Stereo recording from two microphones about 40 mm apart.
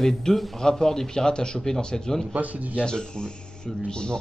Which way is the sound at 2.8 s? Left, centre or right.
Left.